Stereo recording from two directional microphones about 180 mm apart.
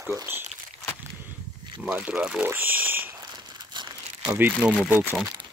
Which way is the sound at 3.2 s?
20° right (ahead or behind).